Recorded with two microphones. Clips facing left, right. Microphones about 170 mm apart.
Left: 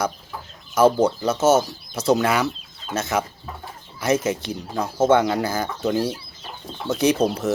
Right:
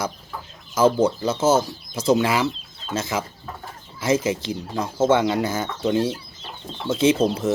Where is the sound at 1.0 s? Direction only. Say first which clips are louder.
Left 1 dB; 30° right (ahead or behind).